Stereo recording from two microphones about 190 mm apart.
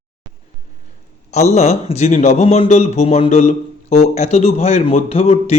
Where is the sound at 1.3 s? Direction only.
35° left (ahead or behind).